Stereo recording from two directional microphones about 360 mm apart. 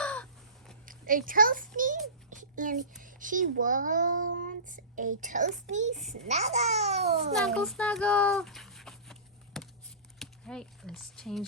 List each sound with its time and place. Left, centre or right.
0.0 s crow: centre
0.9 s a child's voice: right
2.3 s a sound: right
3.0 s a child's voice: right
7.3 s a sound: centre
10.2 s speech: centre